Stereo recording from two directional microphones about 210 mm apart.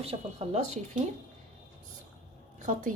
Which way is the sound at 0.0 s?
30° right (ahead or behind).